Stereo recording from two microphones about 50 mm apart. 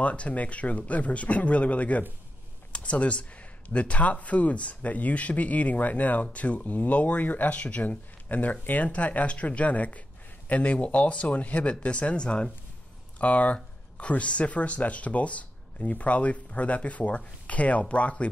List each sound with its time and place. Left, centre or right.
0.0 s speech: left